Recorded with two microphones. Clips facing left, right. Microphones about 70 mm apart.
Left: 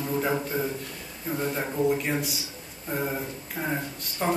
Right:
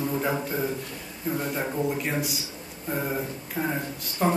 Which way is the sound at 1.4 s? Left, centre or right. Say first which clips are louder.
Left 3 dB; centre.